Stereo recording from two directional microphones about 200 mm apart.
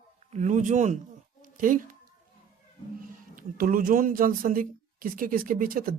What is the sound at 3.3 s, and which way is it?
Speech, 45° right (ahead or behind).